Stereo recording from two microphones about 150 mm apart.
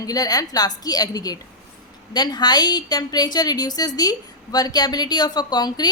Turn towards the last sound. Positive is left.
turn(degrees=25)  # may be behind; listen again after turning